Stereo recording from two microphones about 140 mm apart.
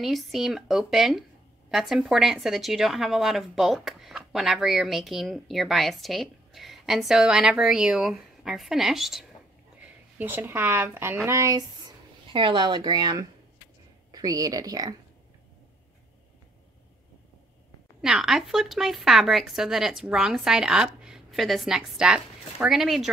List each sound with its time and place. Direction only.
0.0 s speech: centre (ahead or behind)
10.1 s speech: 15° right (ahead or behind)
12.3 s speech: 35° right (ahead or behind)
18.0 s speech: 5° right (ahead or behind)